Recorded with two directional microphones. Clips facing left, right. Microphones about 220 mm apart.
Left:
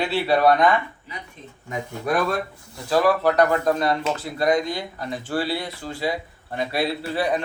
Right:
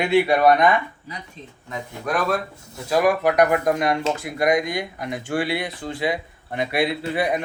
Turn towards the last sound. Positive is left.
turn(degrees=-15)  # may be behind; listen again after turning